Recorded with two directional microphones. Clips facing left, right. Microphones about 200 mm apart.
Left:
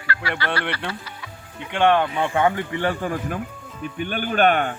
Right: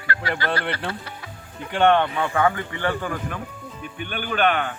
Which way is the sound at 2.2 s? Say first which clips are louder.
Left 1 dB; 25° left (ahead or behind).